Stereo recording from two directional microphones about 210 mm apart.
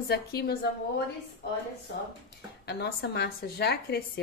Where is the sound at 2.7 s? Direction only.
55° left (ahead or behind).